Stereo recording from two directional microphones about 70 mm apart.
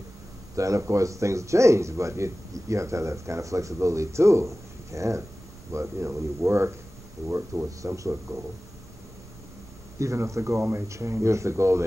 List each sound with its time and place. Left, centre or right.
0.6 s speech: right
7.8 s speech: right
9.9 s speech: right